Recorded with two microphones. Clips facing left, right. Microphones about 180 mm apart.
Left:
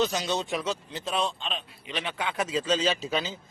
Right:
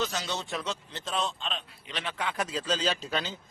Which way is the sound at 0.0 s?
15° left (ahead or behind).